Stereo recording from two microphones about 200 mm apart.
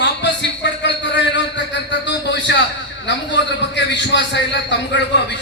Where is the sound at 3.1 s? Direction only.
60° left (ahead or behind).